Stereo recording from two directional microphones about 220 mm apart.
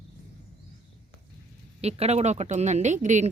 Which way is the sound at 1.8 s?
30° right (ahead or behind).